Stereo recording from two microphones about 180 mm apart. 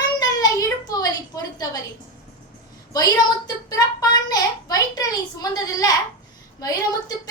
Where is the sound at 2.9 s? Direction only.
20° left (ahead or behind).